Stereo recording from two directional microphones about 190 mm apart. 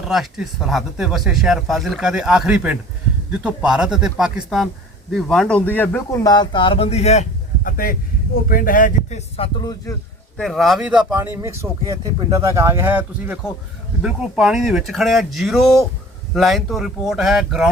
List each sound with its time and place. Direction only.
0.1 s speech: centre (ahead or behind); by 9.5 s 35° left (ahead or behind)
9.6 s speech: 20° left (ahead or behind)
10.3 s speech: centre (ahead or behind)